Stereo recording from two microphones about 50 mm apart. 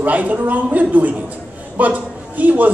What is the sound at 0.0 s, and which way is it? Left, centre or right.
A man's voice, right.